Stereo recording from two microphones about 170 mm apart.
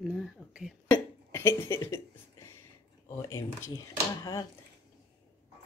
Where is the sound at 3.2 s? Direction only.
20° left (ahead or behind).